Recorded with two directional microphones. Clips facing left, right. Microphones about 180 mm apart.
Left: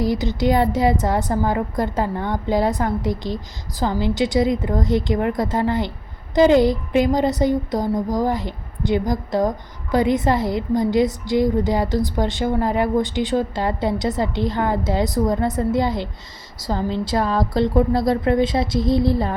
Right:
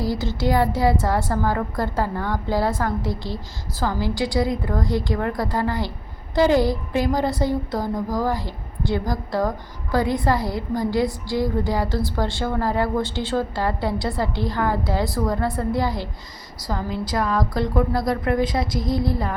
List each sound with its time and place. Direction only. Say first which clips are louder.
0.0 s a woman's voice: left 4 dB; 20° left (ahead or behind)